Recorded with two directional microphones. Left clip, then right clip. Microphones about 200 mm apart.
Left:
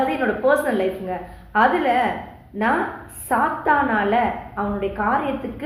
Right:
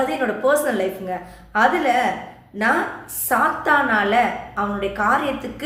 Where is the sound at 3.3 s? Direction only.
15° right (ahead or behind).